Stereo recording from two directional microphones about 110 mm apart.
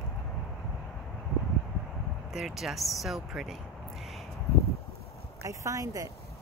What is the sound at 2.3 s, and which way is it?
Speech, 5° right (ahead or behind).